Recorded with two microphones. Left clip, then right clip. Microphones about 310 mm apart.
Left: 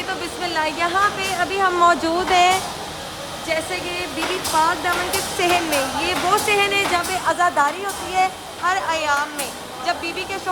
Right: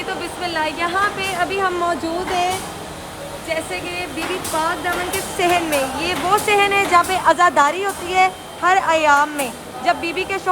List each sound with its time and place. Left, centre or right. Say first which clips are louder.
0.2 s speech: right 1 dB; centre
5.4 s speech: right 2 dB; centre; by 10.4 s right